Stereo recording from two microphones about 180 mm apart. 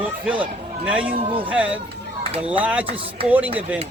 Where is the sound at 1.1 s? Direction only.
30° right (ahead or behind).